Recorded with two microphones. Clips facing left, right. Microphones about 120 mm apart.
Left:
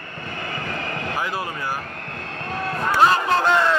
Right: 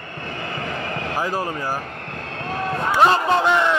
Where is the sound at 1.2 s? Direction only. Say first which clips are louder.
Right 4 dB; 40° right (ahead or behind).